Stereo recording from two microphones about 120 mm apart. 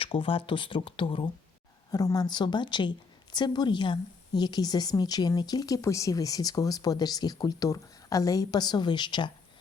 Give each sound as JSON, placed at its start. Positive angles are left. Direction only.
{"t": 0.0, "sound": "speech", "side_deg": 45}
{"t": 1.9, "sound": "speech", "side_deg": 30}